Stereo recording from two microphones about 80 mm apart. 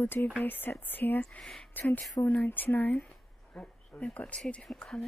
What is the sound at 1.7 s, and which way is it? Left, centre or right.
Speech, left.